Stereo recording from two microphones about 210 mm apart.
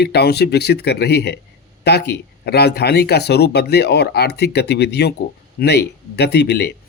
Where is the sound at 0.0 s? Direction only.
50° left (ahead or behind).